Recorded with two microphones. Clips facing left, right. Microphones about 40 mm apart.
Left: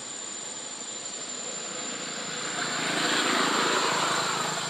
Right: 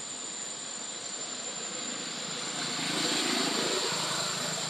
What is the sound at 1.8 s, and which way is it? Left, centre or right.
Vehicle, centre.